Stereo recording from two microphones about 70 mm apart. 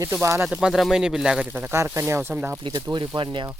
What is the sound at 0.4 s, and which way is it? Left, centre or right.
Speech, centre.